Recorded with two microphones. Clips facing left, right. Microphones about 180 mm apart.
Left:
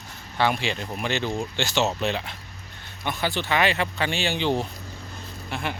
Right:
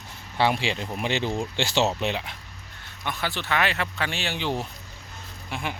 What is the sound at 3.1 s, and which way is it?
Speech, centre (ahead or behind).